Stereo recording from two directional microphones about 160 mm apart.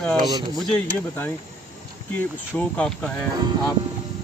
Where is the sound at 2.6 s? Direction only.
5° left (ahead or behind).